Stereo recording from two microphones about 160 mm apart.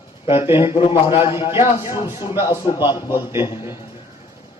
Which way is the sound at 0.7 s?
35° left (ahead or behind).